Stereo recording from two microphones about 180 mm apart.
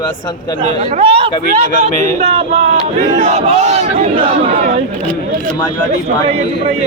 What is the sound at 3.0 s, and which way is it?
Speech, 40° right (ahead or behind).